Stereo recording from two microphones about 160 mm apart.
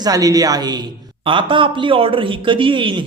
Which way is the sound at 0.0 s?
20° right (ahead or behind).